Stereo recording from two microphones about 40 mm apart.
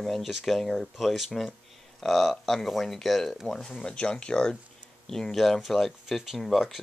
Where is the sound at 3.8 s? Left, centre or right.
Left.